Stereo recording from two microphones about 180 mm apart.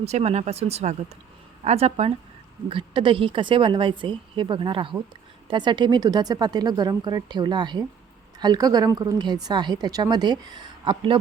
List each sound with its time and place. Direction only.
0.0 s a woman's voice: 35° right (ahead or behind)